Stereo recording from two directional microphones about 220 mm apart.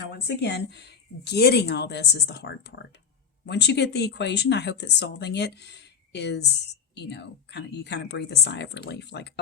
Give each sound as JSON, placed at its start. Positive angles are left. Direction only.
{"t": 0.0, "sound": "speech", "side_deg": 50}